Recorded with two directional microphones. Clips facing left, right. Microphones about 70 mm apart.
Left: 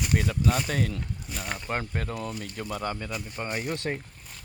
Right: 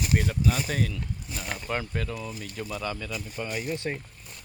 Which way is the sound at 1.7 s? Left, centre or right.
Left.